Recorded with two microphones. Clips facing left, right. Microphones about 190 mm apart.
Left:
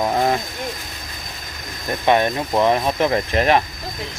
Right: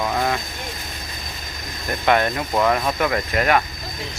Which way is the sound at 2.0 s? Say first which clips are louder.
Left 2 dB; 20° left (ahead or behind).